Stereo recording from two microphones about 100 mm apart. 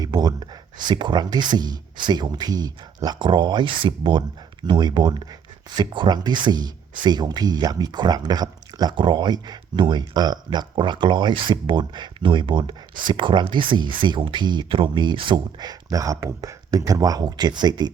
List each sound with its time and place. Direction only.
0.0 s speech: 40° right (ahead or behind)